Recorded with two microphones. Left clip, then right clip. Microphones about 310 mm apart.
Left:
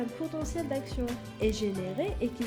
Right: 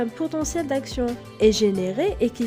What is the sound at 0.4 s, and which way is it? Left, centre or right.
A woman's voice, right.